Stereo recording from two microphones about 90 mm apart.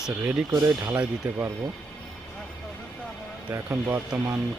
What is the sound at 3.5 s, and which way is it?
Speech, 25° right (ahead or behind).